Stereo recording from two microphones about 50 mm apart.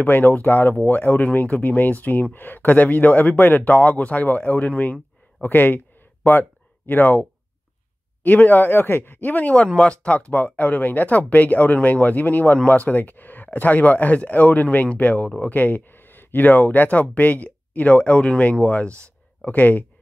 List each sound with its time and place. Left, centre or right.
0.0 s speech: left
6.9 s speech: left
10.1 s speech: left